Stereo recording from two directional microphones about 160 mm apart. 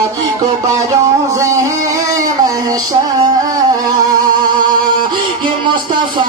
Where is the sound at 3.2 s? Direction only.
25° right (ahead or behind).